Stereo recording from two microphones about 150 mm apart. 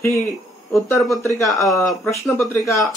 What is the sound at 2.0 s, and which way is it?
Speech, 15° left (ahead or behind).